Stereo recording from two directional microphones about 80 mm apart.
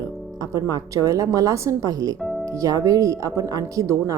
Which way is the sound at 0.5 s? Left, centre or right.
Right.